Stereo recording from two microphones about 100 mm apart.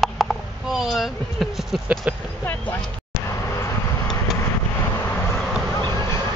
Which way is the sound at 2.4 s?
20° left (ahead or behind).